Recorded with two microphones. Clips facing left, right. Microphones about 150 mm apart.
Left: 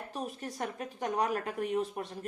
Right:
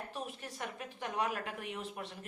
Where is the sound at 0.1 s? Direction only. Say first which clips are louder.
Left 5 dB; 40° left (ahead or behind).